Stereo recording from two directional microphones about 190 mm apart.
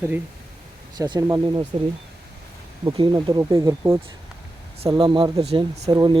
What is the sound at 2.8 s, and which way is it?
Speech, 25° right (ahead or behind).